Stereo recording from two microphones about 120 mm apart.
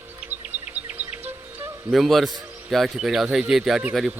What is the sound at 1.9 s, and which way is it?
A man's voice, centre (ahead or behind).